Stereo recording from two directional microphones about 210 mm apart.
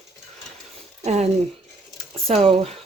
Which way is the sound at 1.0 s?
30° right (ahead or behind).